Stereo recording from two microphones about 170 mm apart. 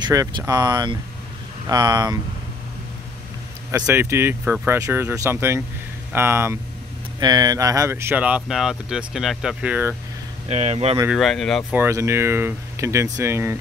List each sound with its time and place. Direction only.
0.0 s speech: 20° right (ahead or behind)
3.8 s speech: 15° right (ahead or behind)
10.5 s speech: 40° right (ahead or behind)
11.1 s speech: centre (ahead or behind)
11.7 s speech: 15° right (ahead or behind)